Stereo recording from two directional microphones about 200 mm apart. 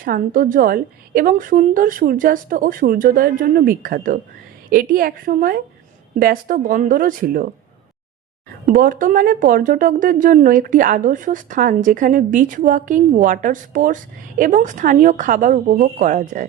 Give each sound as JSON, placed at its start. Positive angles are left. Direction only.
{"t": 0.0, "sound": "a woman's voice", "side_deg": -45}
{"t": 8.7, "sound": "speech", "side_deg": -45}